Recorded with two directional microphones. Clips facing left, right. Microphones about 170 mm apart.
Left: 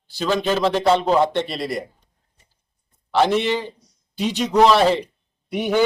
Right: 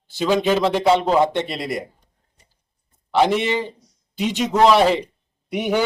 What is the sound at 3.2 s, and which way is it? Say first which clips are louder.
Speech: even; 10° right (ahead or behind).